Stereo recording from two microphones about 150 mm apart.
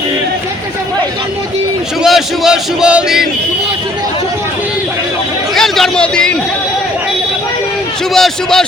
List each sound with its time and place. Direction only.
2.0 s speech: centre (ahead or behind)
5.5 s a man's voice: centre (ahead or behind)
8.1 s speech: centre (ahead or behind)